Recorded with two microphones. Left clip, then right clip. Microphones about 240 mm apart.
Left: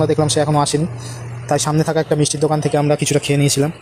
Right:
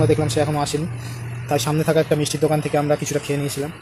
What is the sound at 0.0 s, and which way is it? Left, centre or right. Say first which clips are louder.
A man's voice: left 3 dB; left.